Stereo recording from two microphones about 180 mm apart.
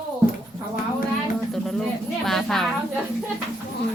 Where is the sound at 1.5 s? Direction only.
Centre (ahead or behind).